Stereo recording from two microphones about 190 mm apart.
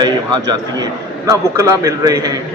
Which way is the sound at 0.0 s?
20° right (ahead or behind).